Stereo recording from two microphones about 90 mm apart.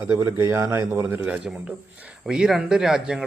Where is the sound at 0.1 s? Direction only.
30° right (ahead or behind).